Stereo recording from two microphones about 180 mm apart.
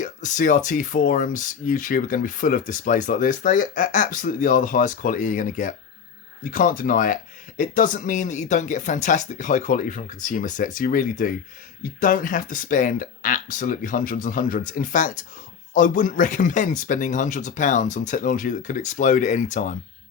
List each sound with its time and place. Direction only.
0.0 s speech: 45° left (ahead or behind)